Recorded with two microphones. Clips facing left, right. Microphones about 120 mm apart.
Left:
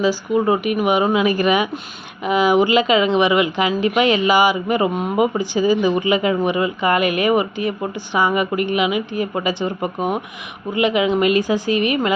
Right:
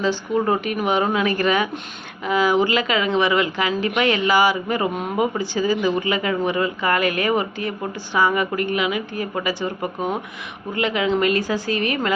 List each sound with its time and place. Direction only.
0.0 s speech: 10° left (ahead or behind)